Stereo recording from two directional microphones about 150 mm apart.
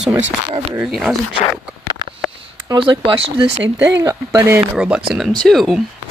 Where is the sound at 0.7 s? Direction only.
5° right (ahead or behind).